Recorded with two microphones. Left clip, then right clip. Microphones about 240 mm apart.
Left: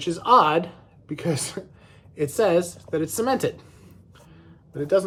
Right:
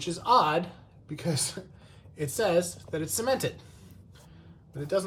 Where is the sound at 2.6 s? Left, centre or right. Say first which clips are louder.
Left 7 dB; centre.